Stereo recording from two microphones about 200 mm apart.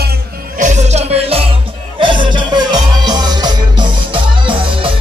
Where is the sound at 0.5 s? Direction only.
35° right (ahead or behind).